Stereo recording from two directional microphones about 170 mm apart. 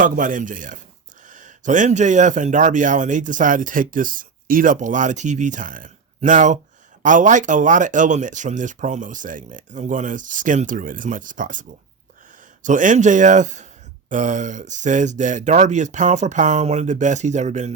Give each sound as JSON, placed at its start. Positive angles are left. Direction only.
{"t": 0.0, "sound": "speech", "side_deg": -50}
{"t": 12.6, "sound": "speech", "side_deg": -50}